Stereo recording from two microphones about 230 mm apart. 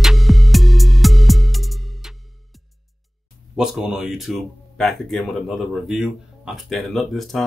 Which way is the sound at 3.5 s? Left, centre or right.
Centre.